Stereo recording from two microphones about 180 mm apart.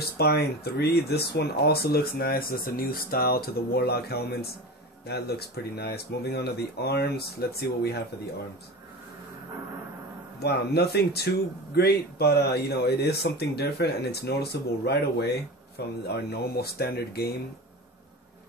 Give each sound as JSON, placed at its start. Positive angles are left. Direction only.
{"t": 0.0, "sound": "speech", "side_deg": 60}
{"t": 10.4, "sound": "speech", "side_deg": 65}